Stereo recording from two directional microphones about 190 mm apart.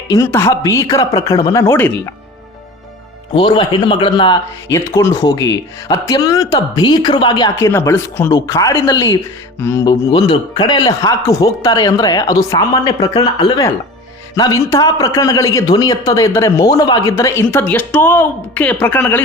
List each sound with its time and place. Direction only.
0.1 s a man's voice: 15° left (ahead or behind)
3.3 s a man's voice: 25° left (ahead or behind); by 19.2 s 10° left (ahead or behind)